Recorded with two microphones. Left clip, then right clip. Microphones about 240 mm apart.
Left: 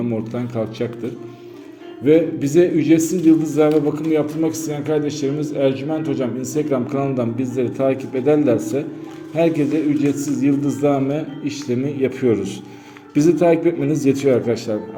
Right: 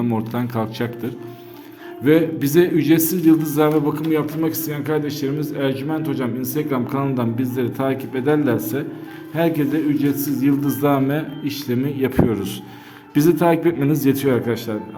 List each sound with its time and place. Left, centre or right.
0.1 s a man's voice: right
2.0 s a man's voice: right